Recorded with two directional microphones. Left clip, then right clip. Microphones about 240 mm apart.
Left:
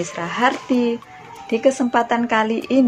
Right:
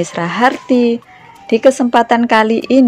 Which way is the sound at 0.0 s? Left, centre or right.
Right.